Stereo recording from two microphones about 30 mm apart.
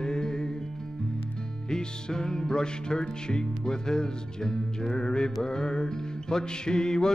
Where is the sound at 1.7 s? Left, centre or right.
Left.